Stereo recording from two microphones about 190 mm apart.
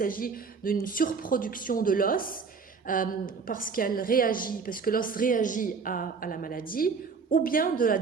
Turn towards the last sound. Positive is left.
turn(degrees=45)  # may be behind; listen again after turning